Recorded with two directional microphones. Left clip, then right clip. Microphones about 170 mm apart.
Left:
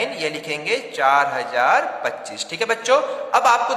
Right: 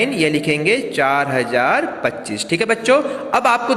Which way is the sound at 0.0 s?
20° right (ahead or behind).